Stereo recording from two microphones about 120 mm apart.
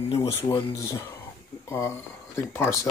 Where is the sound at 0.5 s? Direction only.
25° left (ahead or behind).